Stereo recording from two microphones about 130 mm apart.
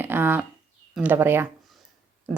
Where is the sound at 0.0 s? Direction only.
15° right (ahead or behind).